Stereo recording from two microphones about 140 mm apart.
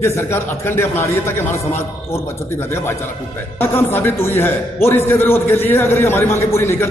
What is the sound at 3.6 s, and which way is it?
A man's voice, 15° left (ahead or behind).